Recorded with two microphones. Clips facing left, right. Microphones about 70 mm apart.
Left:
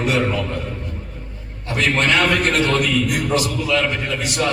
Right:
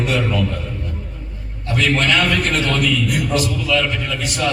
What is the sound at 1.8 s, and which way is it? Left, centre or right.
A man's voice, left.